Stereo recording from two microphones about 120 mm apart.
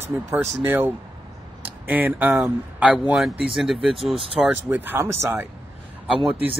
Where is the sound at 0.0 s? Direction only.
20° right (ahead or behind); by 4.2 s 5° right (ahead or behind).